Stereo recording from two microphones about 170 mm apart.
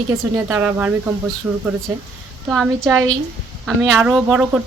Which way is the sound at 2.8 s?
15° right (ahead or behind).